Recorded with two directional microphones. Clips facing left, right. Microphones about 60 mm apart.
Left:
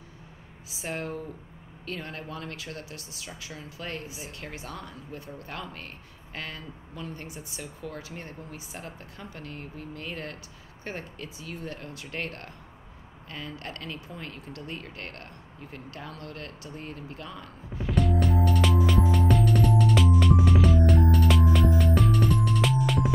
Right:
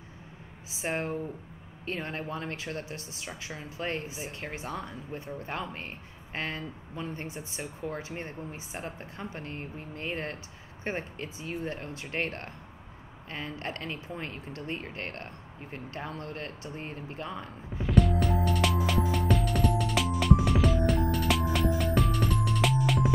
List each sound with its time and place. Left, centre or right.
0.7 s speech: right
17.8 s music: centre